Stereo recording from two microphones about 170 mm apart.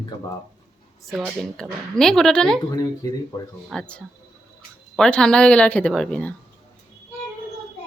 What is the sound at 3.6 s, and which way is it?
Speech, 5° left (ahead or behind).